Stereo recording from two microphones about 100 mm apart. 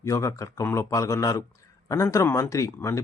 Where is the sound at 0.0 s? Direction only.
30° left (ahead or behind).